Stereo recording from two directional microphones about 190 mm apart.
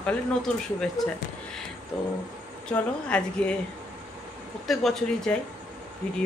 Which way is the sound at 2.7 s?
5° left (ahead or behind).